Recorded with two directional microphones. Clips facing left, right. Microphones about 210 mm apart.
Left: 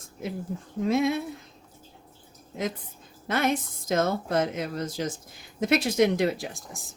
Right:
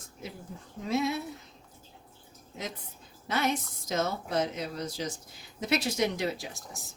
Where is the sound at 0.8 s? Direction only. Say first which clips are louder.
Left 5 dB; 50° left (ahead or behind).